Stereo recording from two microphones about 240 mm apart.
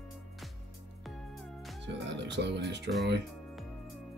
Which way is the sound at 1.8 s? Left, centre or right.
Right.